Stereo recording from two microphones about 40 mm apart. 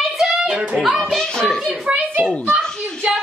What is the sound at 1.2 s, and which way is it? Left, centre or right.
Speech, centre.